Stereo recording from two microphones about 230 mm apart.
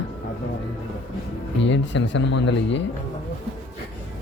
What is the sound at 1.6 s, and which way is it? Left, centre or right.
Speech, left.